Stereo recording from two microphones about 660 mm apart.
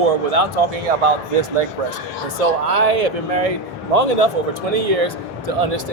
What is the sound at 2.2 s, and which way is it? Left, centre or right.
Speech, right.